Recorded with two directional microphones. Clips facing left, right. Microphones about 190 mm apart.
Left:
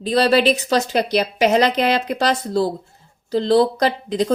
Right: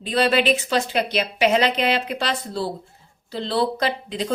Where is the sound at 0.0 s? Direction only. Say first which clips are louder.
Left 4 dB; 40° left (ahead or behind).